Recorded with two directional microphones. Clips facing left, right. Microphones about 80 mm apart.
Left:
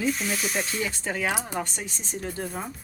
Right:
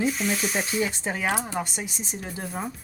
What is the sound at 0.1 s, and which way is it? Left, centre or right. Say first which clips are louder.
Speech: right 1 dB; centre.